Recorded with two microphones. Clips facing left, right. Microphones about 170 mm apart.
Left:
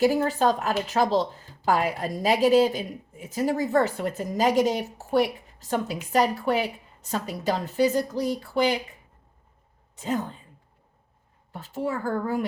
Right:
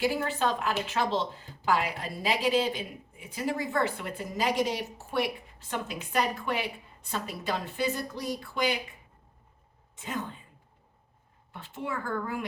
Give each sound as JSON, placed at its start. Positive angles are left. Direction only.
{"t": 0.0, "sound": "speech", "side_deg": 40}
{"t": 9.9, "sound": "speech", "side_deg": 40}
{"t": 11.5, "sound": "speech", "side_deg": 40}